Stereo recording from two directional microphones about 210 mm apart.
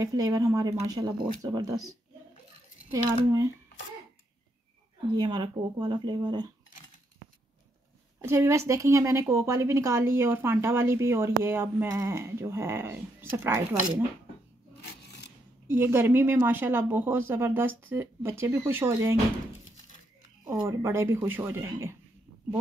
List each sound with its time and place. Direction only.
0.0 s speech: 15° right (ahead or behind)
5.1 s speech: 20° right (ahead or behind)
8.2 s speech: 15° right (ahead or behind)
14.8 s a sound: 50° left (ahead or behind)
15.6 s speech: 10° right (ahead or behind)
20.6 s speech: 15° right (ahead or behind)